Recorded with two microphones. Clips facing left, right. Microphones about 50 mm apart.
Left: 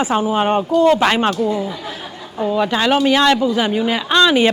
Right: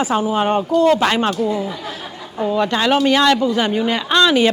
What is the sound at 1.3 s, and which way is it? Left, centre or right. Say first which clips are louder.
Speech: left 1 dB; centre.